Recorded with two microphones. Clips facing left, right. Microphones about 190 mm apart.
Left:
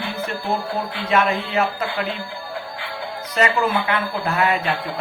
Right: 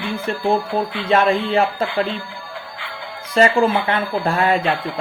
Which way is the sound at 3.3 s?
30° right (ahead or behind).